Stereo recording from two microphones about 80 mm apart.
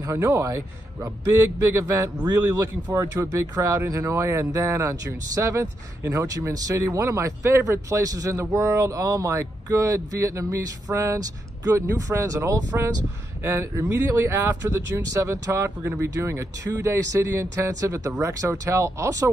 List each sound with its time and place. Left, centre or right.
0.0 s speech: right
1.6 s speech: right